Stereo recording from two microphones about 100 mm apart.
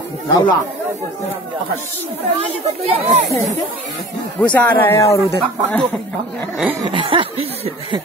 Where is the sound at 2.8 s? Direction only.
70° right (ahead or behind).